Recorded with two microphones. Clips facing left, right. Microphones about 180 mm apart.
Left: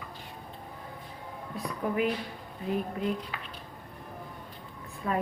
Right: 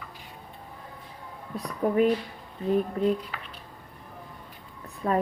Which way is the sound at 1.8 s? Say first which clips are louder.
Right 6 dB; 40° right (ahead or behind).